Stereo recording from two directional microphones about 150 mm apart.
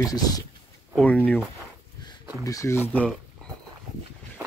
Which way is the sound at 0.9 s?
10° left (ahead or behind).